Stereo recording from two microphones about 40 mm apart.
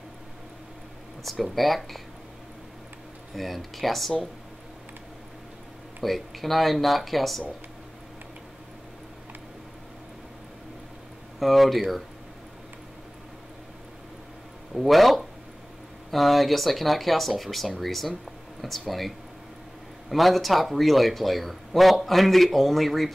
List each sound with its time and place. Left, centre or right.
1.2 s speech: centre
3.3 s speech: centre
6.0 s speech: centre
11.3 s speech: centre
14.7 s speech: centre